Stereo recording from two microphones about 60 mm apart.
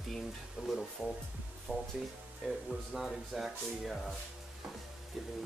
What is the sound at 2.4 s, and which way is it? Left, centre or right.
Speech, centre.